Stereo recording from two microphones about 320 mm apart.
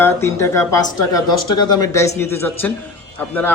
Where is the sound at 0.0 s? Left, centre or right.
Centre.